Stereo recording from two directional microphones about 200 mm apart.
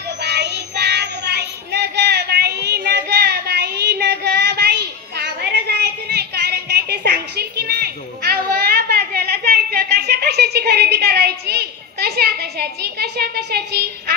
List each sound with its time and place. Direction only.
0.2 s child singing: 55° right (ahead or behind)